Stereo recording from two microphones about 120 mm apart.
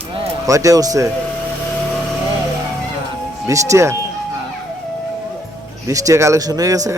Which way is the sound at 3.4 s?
25° right (ahead or behind).